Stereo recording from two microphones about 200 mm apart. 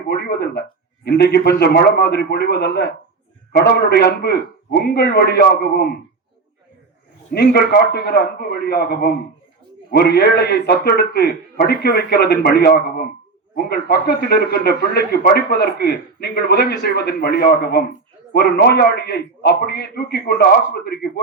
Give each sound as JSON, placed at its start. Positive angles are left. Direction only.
{"t": 0.1, "sound": "a sound", "side_deg": 55}
{"t": 1.0, "sound": "a man's voice", "side_deg": 55}
{"t": 7.3, "sound": "a man's voice", "side_deg": 50}